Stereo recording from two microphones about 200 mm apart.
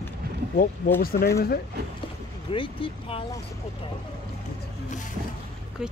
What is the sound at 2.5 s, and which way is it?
Speech, 25° left (ahead or behind).